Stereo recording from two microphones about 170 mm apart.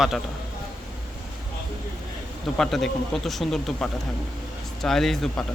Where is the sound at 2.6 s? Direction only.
Centre (ahead or behind).